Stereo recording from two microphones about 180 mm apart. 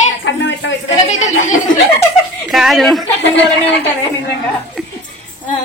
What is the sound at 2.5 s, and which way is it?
Speech, centre (ahead or behind).